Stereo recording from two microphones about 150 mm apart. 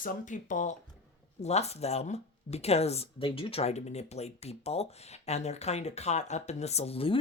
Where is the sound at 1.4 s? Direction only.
45° left (ahead or behind).